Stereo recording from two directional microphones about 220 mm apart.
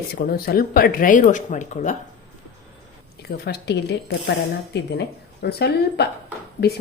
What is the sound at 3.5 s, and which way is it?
Speech, 50° left (ahead or behind).